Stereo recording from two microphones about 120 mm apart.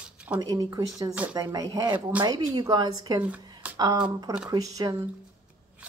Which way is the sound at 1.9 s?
15° right (ahead or behind).